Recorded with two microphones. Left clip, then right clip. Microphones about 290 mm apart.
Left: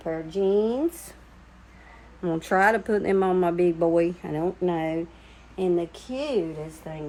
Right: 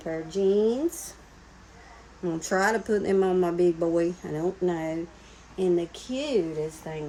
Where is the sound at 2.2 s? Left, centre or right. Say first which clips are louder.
Left 4 dB; centre.